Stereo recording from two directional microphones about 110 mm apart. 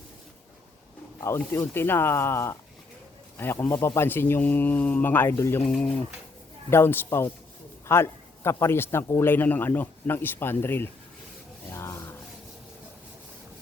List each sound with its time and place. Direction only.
1.4 s speech: 20° left (ahead or behind)
5.6 s speech: 5° left (ahead or behind)
6.7 s speech: 20° left (ahead or behind)
11.7 s rub: 25° left (ahead or behind)